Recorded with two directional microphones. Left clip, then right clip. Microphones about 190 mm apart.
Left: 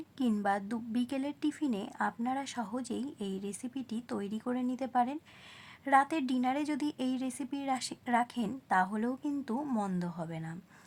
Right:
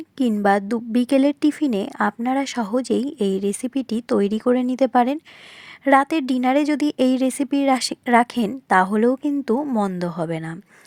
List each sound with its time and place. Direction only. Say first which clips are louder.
0.4 s a woman's voice: right 17 dB; 40° right (ahead or behind)